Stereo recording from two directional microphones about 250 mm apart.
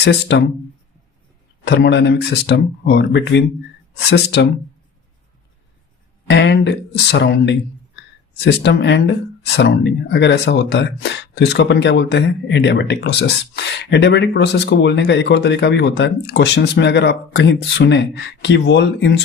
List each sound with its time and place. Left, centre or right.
0.0 s speech: left
1.6 s speech: left
6.2 s speech: left